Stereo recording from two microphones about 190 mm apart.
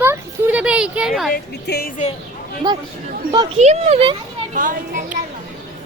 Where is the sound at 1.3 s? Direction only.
55° left (ahead or behind).